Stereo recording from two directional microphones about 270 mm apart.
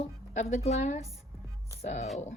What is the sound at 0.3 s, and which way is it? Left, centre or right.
A woman's voice, left.